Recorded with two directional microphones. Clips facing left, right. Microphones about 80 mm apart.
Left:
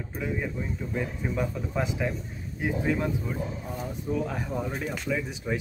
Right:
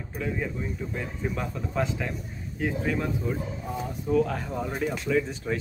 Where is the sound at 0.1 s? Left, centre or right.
Centre.